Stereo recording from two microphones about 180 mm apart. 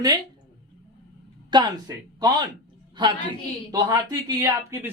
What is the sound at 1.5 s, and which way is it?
Speech, 25° right (ahead or behind).